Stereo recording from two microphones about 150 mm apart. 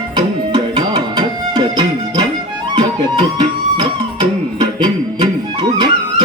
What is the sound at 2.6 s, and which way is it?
Music, 30° right (ahead or behind).